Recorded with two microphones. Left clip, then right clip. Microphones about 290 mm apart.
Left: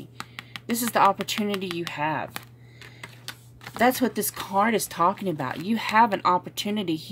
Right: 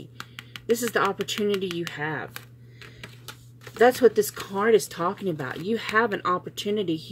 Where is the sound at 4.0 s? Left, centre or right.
Left.